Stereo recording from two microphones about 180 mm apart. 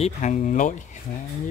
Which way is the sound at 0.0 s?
40° left (ahead or behind).